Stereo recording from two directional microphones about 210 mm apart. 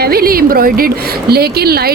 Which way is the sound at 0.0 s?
45° right (ahead or behind).